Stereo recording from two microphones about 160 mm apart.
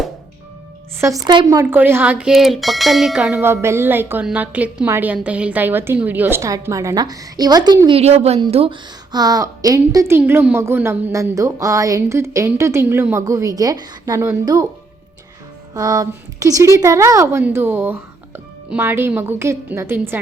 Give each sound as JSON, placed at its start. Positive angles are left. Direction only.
{"t": 1.0, "sound": "speech", "side_deg": -25}
{"t": 7.9, "sound": "a woman's voice", "side_deg": -40}
{"t": 15.7, "sound": "speech", "side_deg": -20}